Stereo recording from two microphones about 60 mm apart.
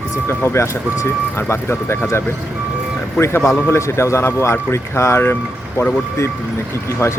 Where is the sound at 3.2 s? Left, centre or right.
Left.